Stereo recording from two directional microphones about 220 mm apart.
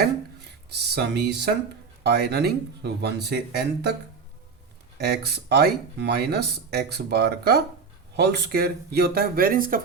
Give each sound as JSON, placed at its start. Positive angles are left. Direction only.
{"t": 0.7, "sound": "speech", "side_deg": -50}
{"t": 4.9, "sound": "speech", "side_deg": -45}